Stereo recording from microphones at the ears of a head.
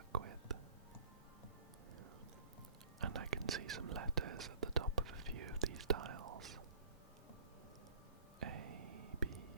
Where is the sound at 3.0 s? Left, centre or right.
Right.